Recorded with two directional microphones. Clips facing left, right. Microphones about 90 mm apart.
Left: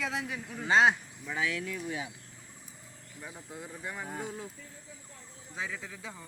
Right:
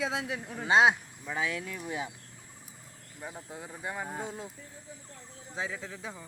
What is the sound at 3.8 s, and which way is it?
Speech, 25° right (ahead or behind).